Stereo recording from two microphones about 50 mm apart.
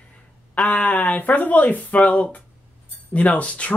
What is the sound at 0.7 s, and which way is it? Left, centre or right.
Speech, left.